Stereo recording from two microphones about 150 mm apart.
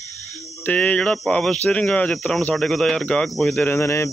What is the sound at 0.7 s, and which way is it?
Speech, 10° left (ahead or behind).